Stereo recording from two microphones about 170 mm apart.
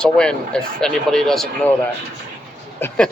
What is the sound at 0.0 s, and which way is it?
Speech, 5° left (ahead or behind).